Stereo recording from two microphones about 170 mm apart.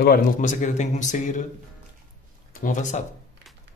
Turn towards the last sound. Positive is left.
turn(degrees=45)  # may be behind; listen again after turning